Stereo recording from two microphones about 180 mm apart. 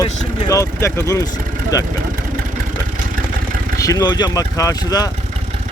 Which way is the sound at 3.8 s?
20° left (ahead or behind).